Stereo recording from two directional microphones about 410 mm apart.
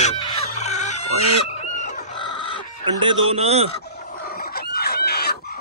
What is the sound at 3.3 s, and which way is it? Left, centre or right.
Speech, centre.